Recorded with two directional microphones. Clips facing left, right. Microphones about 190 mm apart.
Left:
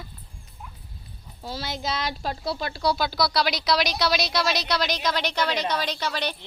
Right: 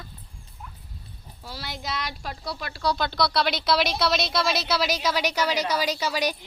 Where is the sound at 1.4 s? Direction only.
25° left (ahead or behind).